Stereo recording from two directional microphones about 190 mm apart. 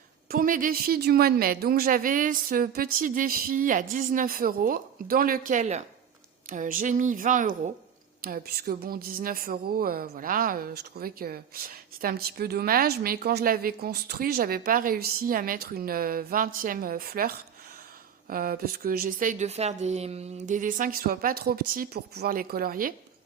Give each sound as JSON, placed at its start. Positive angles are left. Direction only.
{"t": 0.3, "sound": "speech", "side_deg": -45}